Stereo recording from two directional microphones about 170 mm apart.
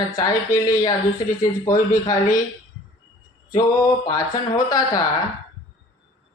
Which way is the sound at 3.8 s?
20° left (ahead or behind).